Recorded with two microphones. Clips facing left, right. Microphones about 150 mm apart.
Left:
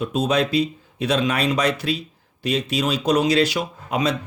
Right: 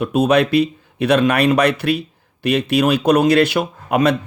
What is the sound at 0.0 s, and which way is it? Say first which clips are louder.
Speech: right 6 dB; 60° right (ahead or behind).